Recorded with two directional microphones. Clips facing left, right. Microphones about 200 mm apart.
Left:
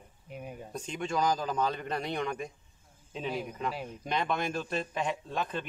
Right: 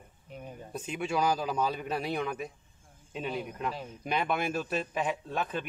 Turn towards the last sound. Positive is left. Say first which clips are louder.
# right 1 dB
turn(degrees=-5)  # may be behind; listen again after turning